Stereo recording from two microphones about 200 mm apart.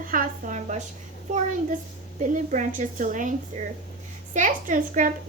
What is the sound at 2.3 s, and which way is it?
Speech, 40° right (ahead or behind).